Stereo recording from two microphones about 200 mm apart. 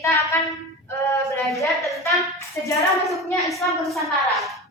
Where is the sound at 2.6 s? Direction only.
15° left (ahead or behind).